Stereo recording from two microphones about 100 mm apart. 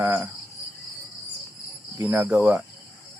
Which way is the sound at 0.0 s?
20° right (ahead or behind).